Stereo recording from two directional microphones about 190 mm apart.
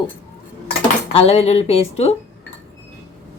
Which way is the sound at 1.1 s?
30° left (ahead or behind).